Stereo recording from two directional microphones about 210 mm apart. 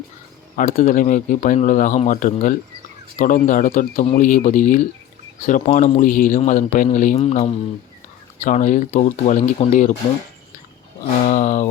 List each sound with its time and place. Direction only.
0.5 s speech: 40° left (ahead or behind)
11.3 s speech: 35° left (ahead or behind)